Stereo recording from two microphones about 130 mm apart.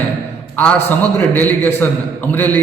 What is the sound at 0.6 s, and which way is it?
A man's voice, 10° left (ahead or behind).